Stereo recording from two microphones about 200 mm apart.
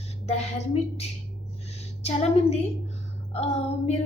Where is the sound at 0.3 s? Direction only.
30° left (ahead or behind).